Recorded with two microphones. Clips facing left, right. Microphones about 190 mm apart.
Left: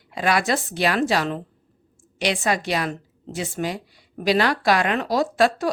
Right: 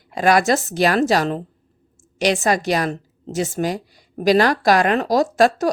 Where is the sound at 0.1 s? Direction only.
45° right (ahead or behind).